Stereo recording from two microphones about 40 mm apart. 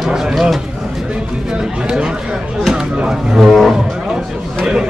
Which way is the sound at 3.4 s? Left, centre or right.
Centre.